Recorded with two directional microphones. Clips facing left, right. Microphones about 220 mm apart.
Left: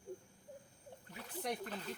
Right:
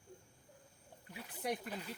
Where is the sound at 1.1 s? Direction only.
10° right (ahead or behind).